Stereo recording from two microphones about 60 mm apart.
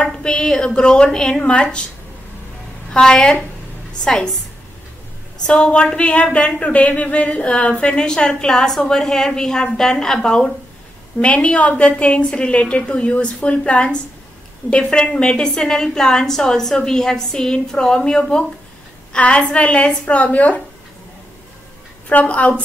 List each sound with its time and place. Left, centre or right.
0.0 s a woman's voice: centre
2.9 s a woman's voice: centre
5.5 s a woman's voice: centre
22.1 s speech: left